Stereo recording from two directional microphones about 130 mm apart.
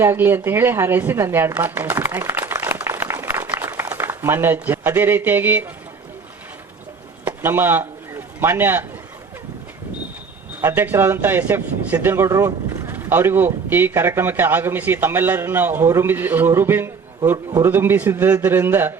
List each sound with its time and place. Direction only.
0.0 s a woman's voice: 20° right (ahead or behind)
7.3 s a sound: 15° right (ahead or behind)
10.6 s a man's voice: 15° right (ahead or behind)